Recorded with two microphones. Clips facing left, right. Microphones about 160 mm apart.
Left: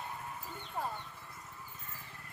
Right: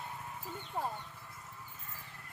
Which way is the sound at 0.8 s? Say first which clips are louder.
Right 1 dB; 20° right (ahead or behind).